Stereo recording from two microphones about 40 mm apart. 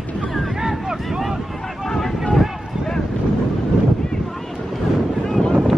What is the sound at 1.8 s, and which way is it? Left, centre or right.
Vehicle, centre.